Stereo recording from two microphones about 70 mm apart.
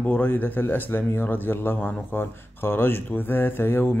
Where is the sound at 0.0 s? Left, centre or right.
Left.